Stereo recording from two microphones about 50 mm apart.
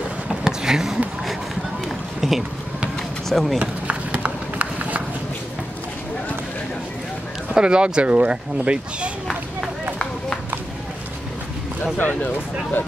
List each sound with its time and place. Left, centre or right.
0.3 s vehicle: centre
2.1 s run: centre
3.3 s speech: centre
3.5 s run: right
7.5 s speech: centre